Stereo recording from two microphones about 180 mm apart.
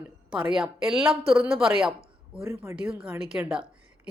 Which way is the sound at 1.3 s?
5° right (ahead or behind).